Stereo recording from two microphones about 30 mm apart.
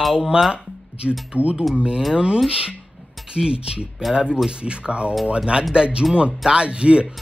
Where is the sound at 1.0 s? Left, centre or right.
Right.